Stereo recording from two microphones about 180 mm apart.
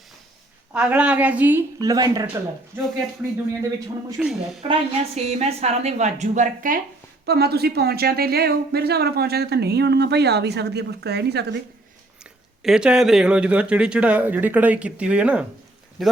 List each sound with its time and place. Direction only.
0.7 s speech: 5° right (ahead or behind)
3.6 s speech: 20° right (ahead or behind)
4.2 s speech: centre (ahead or behind)
4.7 s a woman's voice: 35° right (ahead or behind)
7.3 s speech: 60° right (ahead or behind)
12.2 s speech: 5° right (ahead or behind)